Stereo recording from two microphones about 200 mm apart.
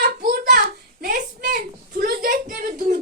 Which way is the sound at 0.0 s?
45° right (ahead or behind).